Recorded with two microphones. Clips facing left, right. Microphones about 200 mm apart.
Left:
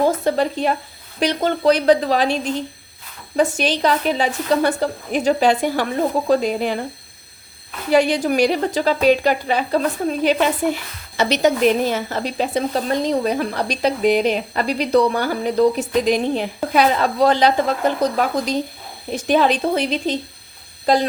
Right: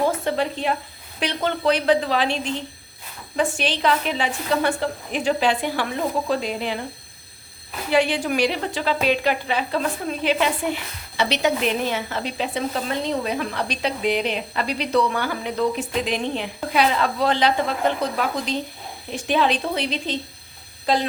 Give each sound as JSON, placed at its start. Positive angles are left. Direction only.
{"t": 0.3, "sound": "a woman's voice", "side_deg": 40}
{"t": 7.9, "sound": "a woman's voice", "side_deg": 40}